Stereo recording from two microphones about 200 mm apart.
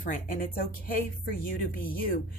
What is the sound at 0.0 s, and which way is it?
A woman's voice, 45° left (ahead or behind).